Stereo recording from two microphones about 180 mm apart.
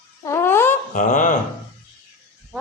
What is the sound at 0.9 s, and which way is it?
Speech, 45° left (ahead or behind).